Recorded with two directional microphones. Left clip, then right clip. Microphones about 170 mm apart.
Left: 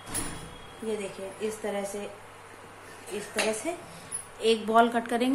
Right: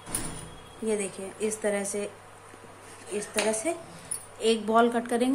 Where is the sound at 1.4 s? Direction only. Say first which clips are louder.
Right 4 dB; 20° right (ahead or behind).